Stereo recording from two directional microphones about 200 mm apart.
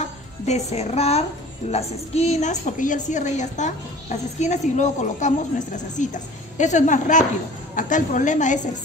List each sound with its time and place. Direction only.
0.0 s a woman's voice: 35° left (ahead or behind)